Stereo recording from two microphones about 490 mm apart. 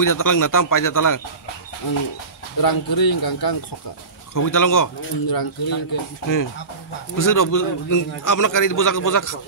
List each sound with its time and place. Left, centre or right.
0.0 s a man's voice: left
2.6 s a man's voice: left